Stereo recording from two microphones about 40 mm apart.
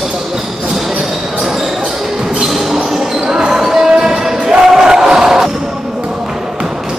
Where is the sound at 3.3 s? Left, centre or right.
Centre.